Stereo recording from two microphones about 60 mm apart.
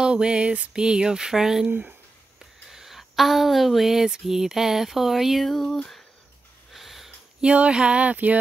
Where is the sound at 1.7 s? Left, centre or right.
Right.